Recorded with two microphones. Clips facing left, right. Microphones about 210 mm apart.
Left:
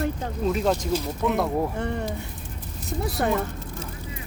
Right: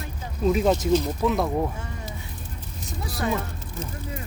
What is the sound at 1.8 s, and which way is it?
Speech, 65° left (ahead or behind).